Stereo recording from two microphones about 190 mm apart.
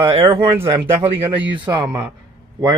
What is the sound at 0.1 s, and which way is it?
Speech, 30° right (ahead or behind).